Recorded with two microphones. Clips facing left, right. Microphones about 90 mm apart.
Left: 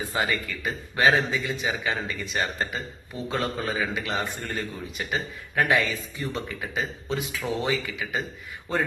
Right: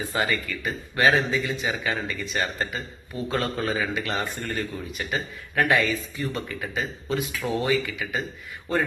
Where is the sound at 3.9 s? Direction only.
15° left (ahead or behind).